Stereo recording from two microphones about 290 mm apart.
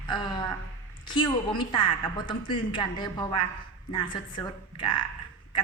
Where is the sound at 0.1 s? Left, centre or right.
Centre.